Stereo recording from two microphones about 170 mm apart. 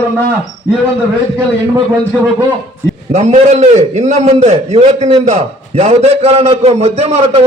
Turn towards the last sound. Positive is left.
turn(degrees=-40)  # may be behind; listen again after turning